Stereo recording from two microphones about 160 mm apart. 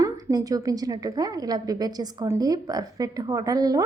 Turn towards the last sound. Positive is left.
turn(degrees=-20)  # may be behind; listen again after turning